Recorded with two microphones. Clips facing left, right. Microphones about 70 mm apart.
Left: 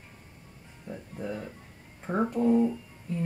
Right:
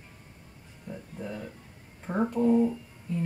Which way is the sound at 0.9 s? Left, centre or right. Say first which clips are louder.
Left 2 dB; centre.